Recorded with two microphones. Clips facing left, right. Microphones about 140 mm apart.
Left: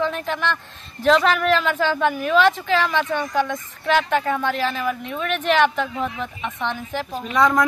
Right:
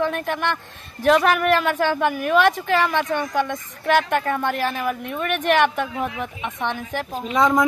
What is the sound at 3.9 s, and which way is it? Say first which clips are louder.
Speech: even; 50° right (ahead or behind).